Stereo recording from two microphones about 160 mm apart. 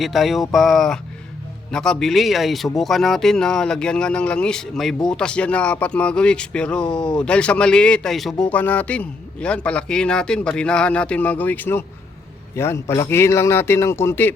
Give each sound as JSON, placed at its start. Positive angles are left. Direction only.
{"t": 0.0, "sound": "speech", "side_deg": 0}